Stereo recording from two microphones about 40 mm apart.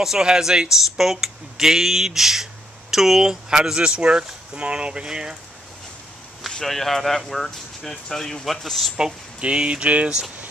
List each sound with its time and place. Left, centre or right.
0.0 s speech: centre
6.6 s speech: centre
9.4 s speech: right